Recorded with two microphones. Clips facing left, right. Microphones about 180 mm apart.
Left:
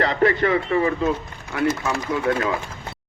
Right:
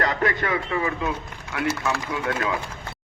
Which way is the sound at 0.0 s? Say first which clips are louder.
Left 5 dB; 30° left (ahead or behind).